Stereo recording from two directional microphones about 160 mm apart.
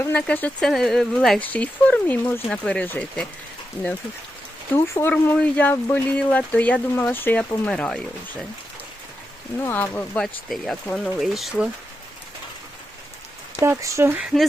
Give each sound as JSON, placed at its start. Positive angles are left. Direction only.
{"t": 0.0, "sound": "speech", "side_deg": 10}
{"t": 4.7, "sound": "speech", "side_deg": 15}
{"t": 9.6, "sound": "speech", "side_deg": 10}
{"t": 13.6, "sound": "speech", "side_deg": -20}
{"t": 14.2, "sound": "speech", "side_deg": -5}